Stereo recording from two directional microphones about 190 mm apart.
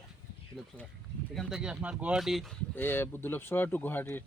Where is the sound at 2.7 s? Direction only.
10° left (ahead or behind).